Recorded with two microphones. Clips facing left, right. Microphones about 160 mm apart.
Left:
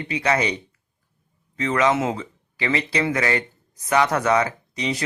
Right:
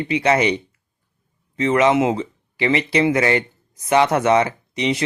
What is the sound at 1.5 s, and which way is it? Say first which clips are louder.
Speech: right 4 dB; 25° right (ahead or behind).